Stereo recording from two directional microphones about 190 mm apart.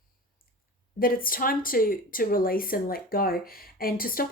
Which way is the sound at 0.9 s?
50° left (ahead or behind).